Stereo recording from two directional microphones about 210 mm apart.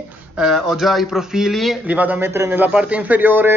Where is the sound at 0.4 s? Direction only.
Centre (ahead or behind).